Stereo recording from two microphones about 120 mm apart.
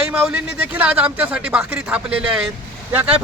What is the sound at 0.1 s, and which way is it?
Speech, 10° right (ahead or behind).